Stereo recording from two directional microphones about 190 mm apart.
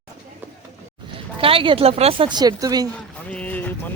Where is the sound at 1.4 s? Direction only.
30° right (ahead or behind).